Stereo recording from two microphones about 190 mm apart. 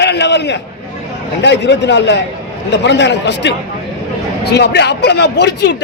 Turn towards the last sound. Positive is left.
turn(degrees=60)  # may be behind; listen again after turning